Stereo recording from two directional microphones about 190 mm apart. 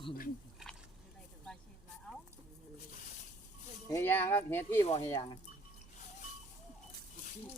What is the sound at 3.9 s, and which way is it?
Speech, 15° left (ahead or behind).